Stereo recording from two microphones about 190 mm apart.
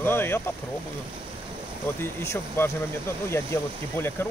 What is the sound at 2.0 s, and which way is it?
Speech, 15° left (ahead or behind).